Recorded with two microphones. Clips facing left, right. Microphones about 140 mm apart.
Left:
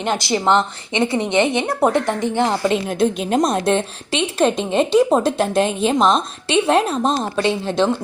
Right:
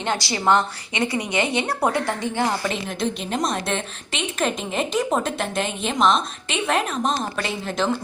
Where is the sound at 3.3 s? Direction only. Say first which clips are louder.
Left 9 dB; 35° left (ahead or behind).